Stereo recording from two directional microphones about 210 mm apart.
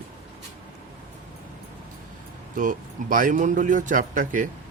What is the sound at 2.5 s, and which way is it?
Speech, 40° right (ahead or behind).